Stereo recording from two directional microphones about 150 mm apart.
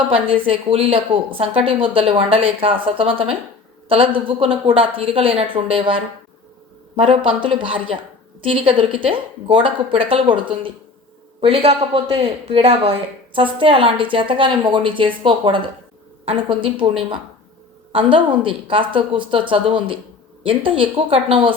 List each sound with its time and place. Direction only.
0.1 s a woman's voice: 35° right (ahead or behind)
17.9 s a woman's voice: 35° right (ahead or behind)